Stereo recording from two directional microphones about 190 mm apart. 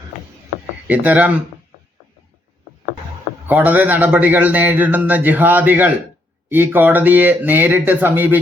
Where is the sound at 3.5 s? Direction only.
10° right (ahead or behind).